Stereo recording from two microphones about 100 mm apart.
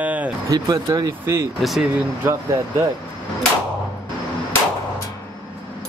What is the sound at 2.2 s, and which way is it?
Speech, 25° right (ahead or behind).